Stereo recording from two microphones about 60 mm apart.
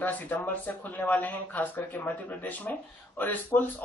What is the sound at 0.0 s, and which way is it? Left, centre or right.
Speech, left.